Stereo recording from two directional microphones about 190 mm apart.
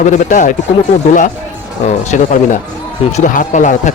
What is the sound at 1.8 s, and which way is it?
Speech, 40° left (ahead or behind).